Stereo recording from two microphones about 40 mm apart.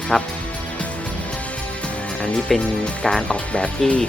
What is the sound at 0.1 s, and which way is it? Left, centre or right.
Speech, centre.